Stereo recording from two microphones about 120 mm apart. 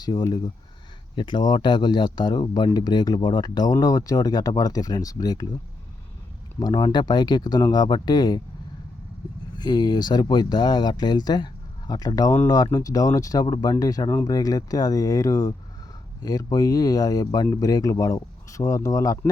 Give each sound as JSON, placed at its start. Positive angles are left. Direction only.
{"t": 0.0, "sound": "speech", "side_deg": 40}
{"t": 6.6, "sound": "speech", "side_deg": 40}
{"t": 9.6, "sound": "speech", "side_deg": 35}